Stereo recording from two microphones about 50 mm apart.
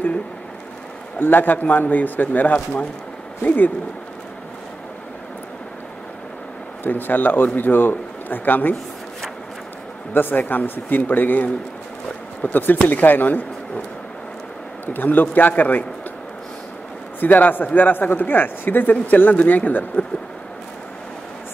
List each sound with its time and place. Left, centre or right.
1.2 s speech: left
6.8 s speech: left
10.1 s speech: left
14.9 s speech: left
17.2 s speech: left